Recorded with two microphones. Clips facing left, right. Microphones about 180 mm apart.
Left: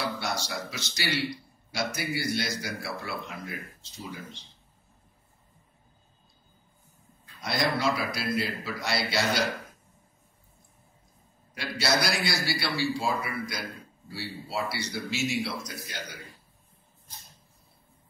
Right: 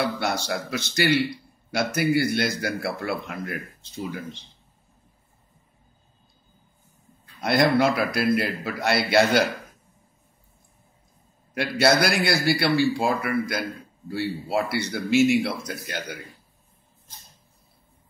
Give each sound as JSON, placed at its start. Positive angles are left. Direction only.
{"t": 0.2, "sound": "a man's voice", "side_deg": -60}
{"t": 7.4, "sound": "a man's voice", "side_deg": -60}
{"t": 11.5, "sound": "a man's voice", "side_deg": -60}